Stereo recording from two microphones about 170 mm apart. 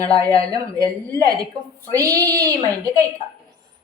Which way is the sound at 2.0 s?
20° right (ahead or behind).